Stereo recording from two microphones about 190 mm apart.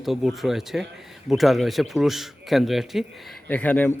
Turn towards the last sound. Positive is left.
turn(degrees=10)  # may be behind; listen again after turning